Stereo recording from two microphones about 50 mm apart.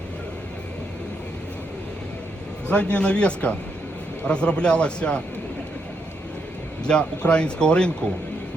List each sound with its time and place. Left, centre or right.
2.6 s speech: left
6.8 s speech: centre